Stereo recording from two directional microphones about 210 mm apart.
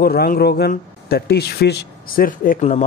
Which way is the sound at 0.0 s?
45° left (ahead or behind).